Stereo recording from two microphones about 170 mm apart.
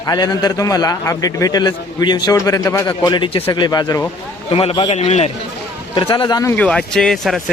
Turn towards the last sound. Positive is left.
turn(degrees=0)  # may be behind; listen again after turning